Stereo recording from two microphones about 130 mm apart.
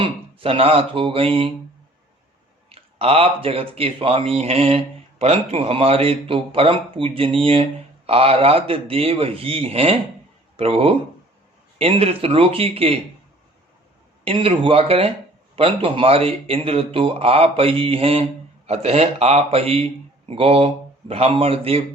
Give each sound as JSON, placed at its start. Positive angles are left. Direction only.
{"t": 0.0, "sound": "a man's voice", "side_deg": -45}
{"t": 2.6, "sound": "a man's voice", "side_deg": -45}
{"t": 14.3, "sound": "a man's voice", "side_deg": -45}